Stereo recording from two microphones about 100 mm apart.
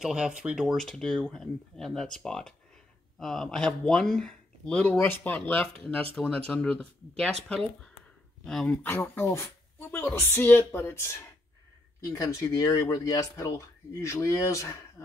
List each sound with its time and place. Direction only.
0.0 s speech: 10° right (ahead or behind); by 4.9 s 10° left (ahead or behind)
4.9 s speech: 20° left (ahead or behind); by 8.7 s 5° left (ahead or behind)
8.8 s speech: 20° left (ahead or behind)